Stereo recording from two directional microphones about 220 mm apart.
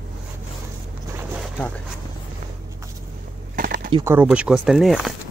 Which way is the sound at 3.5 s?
40° right (ahead or behind).